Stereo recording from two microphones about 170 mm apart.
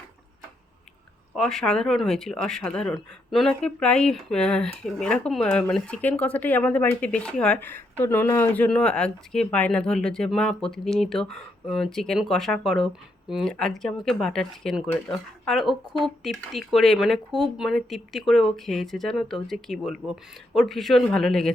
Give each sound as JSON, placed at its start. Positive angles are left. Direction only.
{"t": 1.4, "sound": "speech", "side_deg": 0}